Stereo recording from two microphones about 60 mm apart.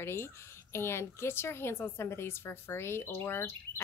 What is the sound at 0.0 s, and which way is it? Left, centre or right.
A woman's voice, left.